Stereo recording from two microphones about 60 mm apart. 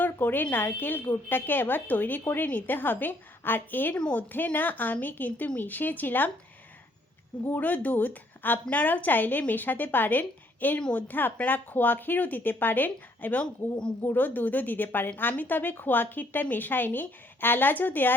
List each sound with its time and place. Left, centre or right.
0.0 s a sound: left
0.5 s speech: left
7.4 s speech: left
13.4 s speech: centre
14.0 s speech: left